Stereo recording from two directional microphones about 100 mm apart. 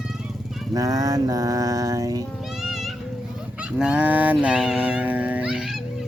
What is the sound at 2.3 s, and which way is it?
Music, 5° right (ahead or behind).